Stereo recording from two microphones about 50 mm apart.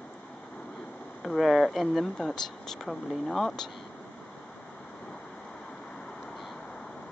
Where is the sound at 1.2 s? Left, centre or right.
Centre.